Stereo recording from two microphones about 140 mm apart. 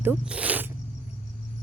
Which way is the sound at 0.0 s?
10° right (ahead or behind).